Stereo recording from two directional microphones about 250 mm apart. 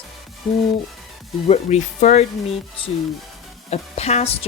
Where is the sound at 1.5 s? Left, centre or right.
Left.